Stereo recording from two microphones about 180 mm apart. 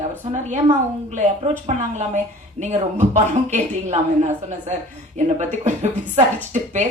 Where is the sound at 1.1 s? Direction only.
40° right (ahead or behind).